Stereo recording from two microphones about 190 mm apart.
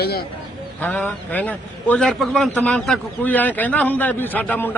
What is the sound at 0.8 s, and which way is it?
A man's voice, 10° left (ahead or behind).